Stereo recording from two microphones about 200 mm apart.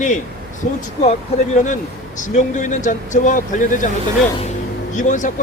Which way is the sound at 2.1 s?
40° left (ahead or behind).